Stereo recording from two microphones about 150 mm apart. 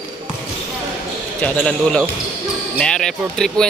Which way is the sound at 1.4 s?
5° left (ahead or behind).